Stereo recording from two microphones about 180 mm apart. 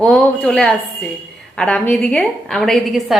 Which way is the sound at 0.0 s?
5° left (ahead or behind).